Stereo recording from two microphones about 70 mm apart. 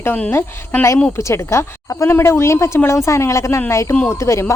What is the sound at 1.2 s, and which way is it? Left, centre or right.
A woman's voice, left.